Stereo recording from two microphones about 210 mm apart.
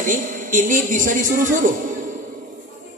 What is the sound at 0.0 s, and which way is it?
A man's voice, 40° right (ahead or behind).